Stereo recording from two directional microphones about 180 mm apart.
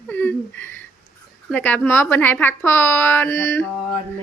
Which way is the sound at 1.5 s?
10° left (ahead or behind).